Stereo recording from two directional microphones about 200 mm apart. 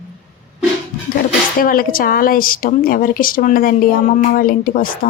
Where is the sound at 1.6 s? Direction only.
45° left (ahead or behind).